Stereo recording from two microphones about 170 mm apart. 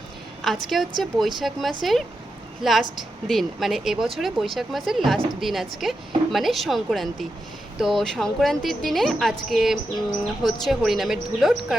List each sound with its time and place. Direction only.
0.4 s speech: centre (ahead or behind)